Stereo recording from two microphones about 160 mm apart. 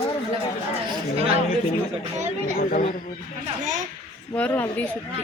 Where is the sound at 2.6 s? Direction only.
55° left (ahead or behind).